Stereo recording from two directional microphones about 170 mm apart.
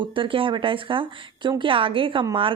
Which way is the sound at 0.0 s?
30° right (ahead or behind).